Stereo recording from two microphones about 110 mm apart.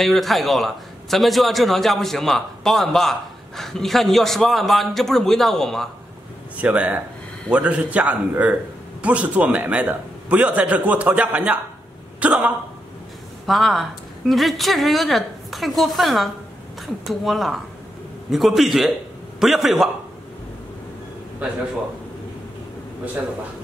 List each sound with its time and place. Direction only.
0.0 s a man's voice: centre (ahead or behind)
6.5 s a man's voice: 15° right (ahead or behind)
13.5 s a man's voice: centre (ahead or behind)